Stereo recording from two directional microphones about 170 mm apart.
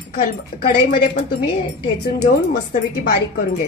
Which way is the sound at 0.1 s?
60° left (ahead or behind).